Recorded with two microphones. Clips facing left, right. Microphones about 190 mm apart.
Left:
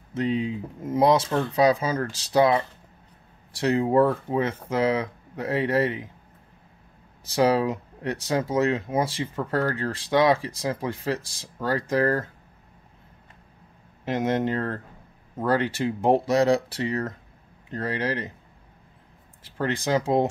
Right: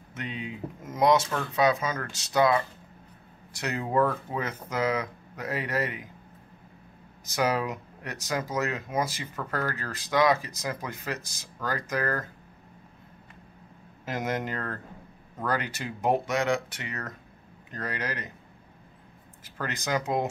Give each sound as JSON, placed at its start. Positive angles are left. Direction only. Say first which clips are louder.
{"t": 0.1, "sound": "speech", "louder": "left 11 dB", "side_deg": 30}
{"t": 7.2, "sound": "speech", "louder": "left 6 dB", "side_deg": 30}
{"t": 14.0, "sound": "speech", "louder": "left 7 dB", "side_deg": 25}
{"t": 19.4, "sound": "speech", "louder": "left 7 dB", "side_deg": 30}